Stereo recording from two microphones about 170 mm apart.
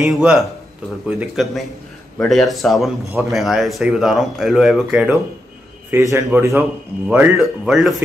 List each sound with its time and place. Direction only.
0.0 s speech: centre (ahead or behind)
5.9 s a man's voice: 15° right (ahead or behind)
7.3 s speech: centre (ahead or behind)